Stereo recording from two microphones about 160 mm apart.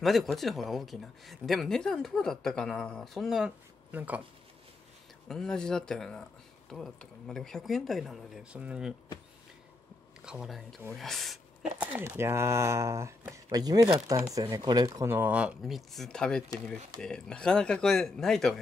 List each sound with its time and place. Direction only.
0.0 s speech: centre (ahead or behind)
5.3 s speech: 5° left (ahead or behind)
10.2 s speech: 5° right (ahead or behind)
11.8 s speech: 15° right (ahead or behind); by 18.6 s centre (ahead or behind)